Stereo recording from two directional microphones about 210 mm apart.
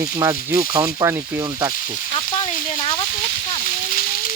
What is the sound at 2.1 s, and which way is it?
Speech, 25° left (ahead or behind).